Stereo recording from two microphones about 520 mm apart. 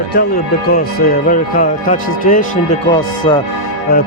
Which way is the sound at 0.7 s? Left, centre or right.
Centre.